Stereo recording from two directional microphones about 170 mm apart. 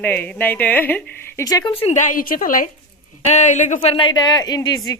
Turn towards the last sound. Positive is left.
turn(degrees=20)  # may be behind; listen again after turning